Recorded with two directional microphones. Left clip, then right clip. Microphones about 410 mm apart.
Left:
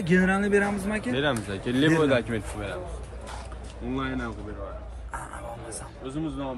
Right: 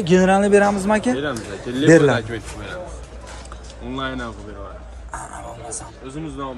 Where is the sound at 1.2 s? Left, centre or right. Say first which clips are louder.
Right 1 dB; centre.